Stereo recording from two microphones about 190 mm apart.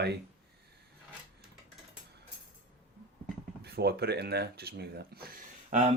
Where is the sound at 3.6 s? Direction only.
55° right (ahead or behind).